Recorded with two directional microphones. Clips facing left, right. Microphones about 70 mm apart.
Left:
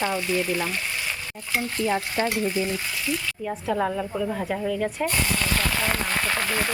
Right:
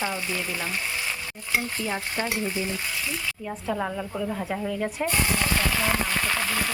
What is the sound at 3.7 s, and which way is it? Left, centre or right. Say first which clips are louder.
Speech: left 6 dB; centre.